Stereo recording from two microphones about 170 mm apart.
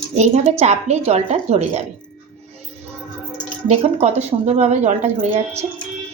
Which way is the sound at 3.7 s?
40° right (ahead or behind).